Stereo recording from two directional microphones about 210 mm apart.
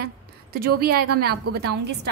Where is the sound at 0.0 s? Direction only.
45° right (ahead or behind).